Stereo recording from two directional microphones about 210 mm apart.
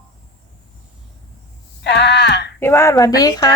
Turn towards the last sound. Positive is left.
turn(degrees=15)  # may be behind; listen again after turning